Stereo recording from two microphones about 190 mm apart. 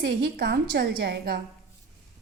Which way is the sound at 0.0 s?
55° right (ahead or behind).